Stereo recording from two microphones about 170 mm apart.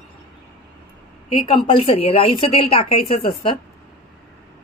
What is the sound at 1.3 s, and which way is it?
A woman's voice, 30° left (ahead or behind).